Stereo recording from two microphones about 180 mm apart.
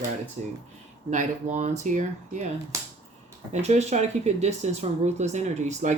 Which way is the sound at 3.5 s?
40° right (ahead or behind).